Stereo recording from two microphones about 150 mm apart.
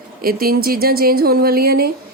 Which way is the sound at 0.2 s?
80° right.